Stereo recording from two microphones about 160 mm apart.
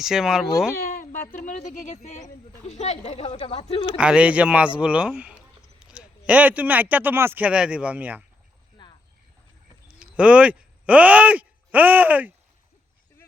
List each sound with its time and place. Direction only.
0.0 s speech: 5° right (ahead or behind)
0.8 s a sound: 65° left (ahead or behind)
1.5 s speech: 50° left (ahead or behind); by 3.9 s 35° left (ahead or behind)
3.9 s speech: 5° right (ahead or behind)
8.8 s a sound: 30° left (ahead or behind)
10.0 s speech: 5° right (ahead or behind)